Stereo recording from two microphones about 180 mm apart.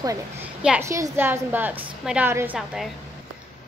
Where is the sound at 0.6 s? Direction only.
5° right (ahead or behind).